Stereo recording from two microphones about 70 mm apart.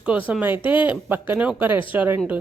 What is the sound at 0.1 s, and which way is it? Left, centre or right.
Speech, right.